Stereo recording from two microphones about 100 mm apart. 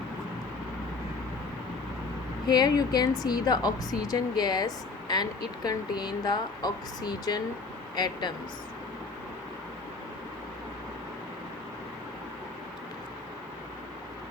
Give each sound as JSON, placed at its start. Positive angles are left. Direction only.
{"t": 2.5, "sound": "speech", "side_deg": 45}